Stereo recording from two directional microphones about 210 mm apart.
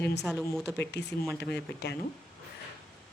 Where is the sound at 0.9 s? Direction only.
55° left (ahead or behind).